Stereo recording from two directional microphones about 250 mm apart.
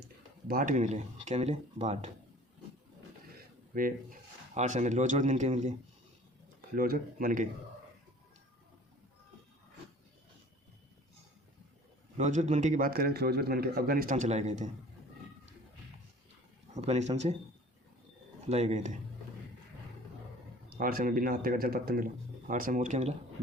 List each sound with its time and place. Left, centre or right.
0.4 s speech: right
3.8 s speech: right
6.7 s speech: right
12.1 s speech: right
16.7 s speech: right
18.4 s speech: right
20.7 s speech: right